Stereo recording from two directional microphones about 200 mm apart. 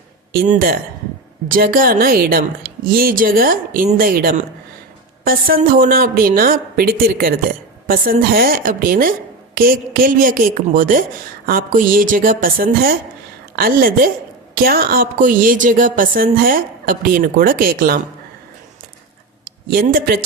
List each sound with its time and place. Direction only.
0.3 s speech: 45° right (ahead or behind)
19.7 s speech: 45° right (ahead or behind)